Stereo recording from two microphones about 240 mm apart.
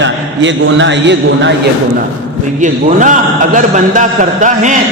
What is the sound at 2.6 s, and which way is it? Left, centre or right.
A man's voice, right.